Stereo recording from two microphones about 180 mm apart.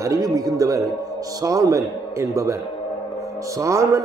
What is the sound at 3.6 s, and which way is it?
Speech, 15° right (ahead or behind).